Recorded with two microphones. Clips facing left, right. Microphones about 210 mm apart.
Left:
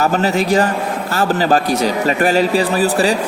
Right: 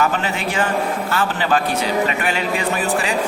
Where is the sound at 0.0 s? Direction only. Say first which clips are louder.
Left 5 dB; 40° left (ahead or behind).